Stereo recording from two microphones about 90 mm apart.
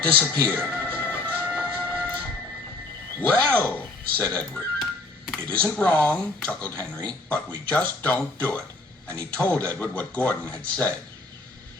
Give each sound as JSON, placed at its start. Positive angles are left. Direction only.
{"t": 0.0, "sound": "speech", "side_deg": 15}
{"t": 0.8, "sound": "music", "side_deg": 15}
{"t": 1.5, "sound": "a sound", "side_deg": 15}
{"t": 3.2, "sound": "a man's voice", "side_deg": 20}